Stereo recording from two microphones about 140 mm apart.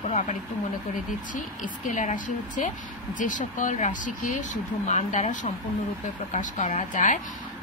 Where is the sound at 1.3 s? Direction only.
65° left (ahead or behind).